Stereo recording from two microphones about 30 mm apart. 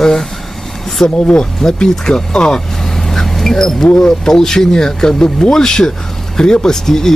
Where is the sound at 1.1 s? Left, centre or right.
Left.